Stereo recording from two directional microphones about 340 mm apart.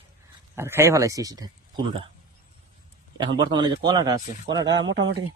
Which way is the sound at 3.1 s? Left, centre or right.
Centre.